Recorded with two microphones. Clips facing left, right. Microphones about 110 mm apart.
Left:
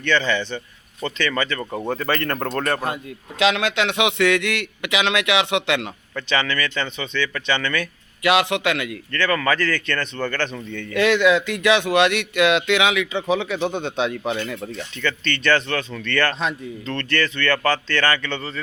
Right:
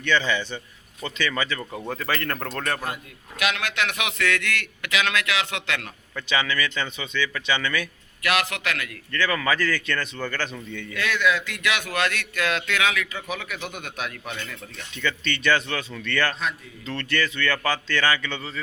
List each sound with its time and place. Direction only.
0.0 s speech: 10° right (ahead or behind)
2.8 s speech: 25° left (ahead or behind)
6.1 s speech: 10° right (ahead or behind)
8.2 s speech: 25° left (ahead or behind)
9.1 s speech: 10° right (ahead or behind)
10.9 s speech: 25° left (ahead or behind)
14.9 s speech: 10° right (ahead or behind)